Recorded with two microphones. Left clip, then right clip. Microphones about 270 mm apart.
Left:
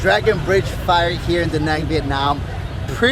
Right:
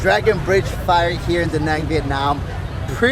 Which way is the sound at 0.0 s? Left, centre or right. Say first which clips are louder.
Even; centre.